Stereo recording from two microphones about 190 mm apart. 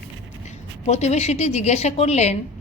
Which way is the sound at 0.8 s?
35° left (ahead or behind).